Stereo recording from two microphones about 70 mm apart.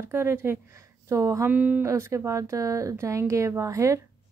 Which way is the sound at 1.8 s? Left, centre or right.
Right.